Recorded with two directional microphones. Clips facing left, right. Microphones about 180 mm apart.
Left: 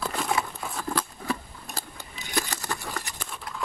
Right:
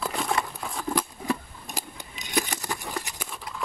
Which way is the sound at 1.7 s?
15° right (ahead or behind).